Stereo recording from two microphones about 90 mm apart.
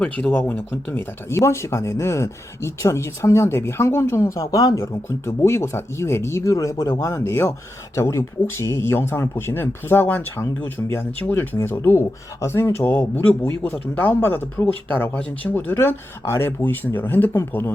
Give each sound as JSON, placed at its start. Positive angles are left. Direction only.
{"t": 0.0, "sound": "speech", "side_deg": 20}
{"t": 16.5, "sound": "speech", "side_deg": 20}